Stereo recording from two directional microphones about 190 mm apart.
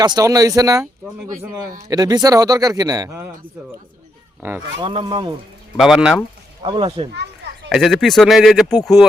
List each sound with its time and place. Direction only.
0.0 s a man's voice: 20° right (ahead or behind)
1.9 s a man's voice: 20° right (ahead or behind)
4.8 s a man's voice: 25° right (ahead or behind)
5.7 s speech: centre (ahead or behind)
6.7 s a man's voice: 25° right (ahead or behind)
7.7 s speech: centre (ahead or behind)